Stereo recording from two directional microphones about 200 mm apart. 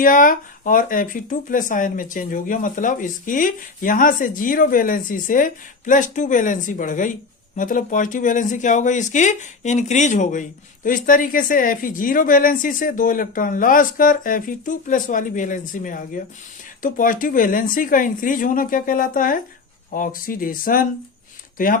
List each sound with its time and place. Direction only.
0.0 s speech: 45° left (ahead or behind)